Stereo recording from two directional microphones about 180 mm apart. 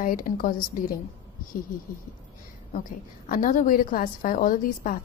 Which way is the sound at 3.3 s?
45° left (ahead or behind).